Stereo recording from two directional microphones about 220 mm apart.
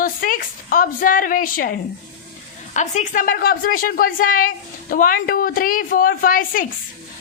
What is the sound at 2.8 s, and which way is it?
A woman's voice, 35° left (ahead or behind).